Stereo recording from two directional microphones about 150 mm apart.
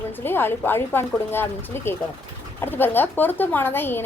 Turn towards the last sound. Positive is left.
turn(degrees=15)  # may be behind; listen again after turning